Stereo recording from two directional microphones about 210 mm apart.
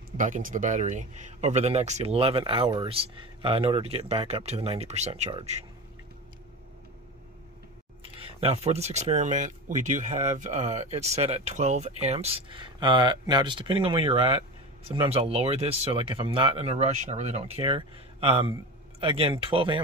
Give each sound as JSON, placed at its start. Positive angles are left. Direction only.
{"t": 0.2, "sound": "speech", "side_deg": -40}
{"t": 8.0, "sound": "speech", "side_deg": -25}